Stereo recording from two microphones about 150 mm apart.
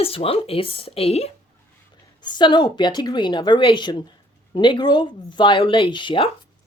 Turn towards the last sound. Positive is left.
turn(degrees=35)  # may be behind; listen again after turning